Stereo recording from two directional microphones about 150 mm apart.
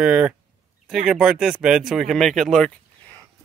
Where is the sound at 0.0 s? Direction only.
5° right (ahead or behind).